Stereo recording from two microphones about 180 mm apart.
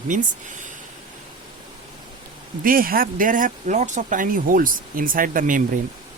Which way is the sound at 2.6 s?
50° right (ahead or behind).